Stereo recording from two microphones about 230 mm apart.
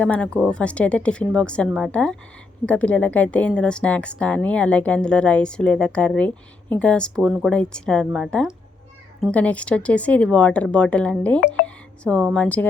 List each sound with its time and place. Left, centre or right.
0.0 s a woman's voice: centre